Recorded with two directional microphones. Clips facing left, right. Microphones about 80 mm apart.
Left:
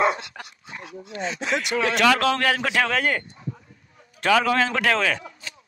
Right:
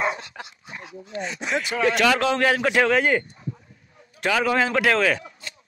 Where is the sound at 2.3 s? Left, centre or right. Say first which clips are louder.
Right 2 dB; centre.